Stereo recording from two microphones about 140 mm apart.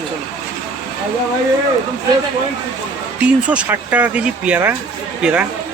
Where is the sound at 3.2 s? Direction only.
10° right (ahead or behind).